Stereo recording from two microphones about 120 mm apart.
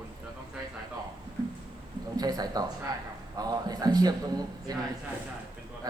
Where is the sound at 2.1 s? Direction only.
30° right (ahead or behind).